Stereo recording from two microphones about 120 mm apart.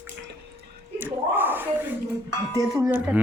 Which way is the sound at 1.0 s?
15° right (ahead or behind).